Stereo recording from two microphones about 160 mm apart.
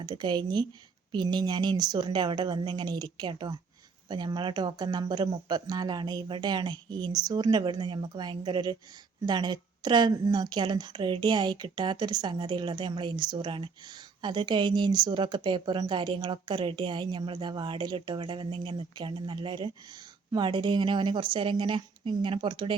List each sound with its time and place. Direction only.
0.0 s a woman's voice: 25° right (ahead or behind)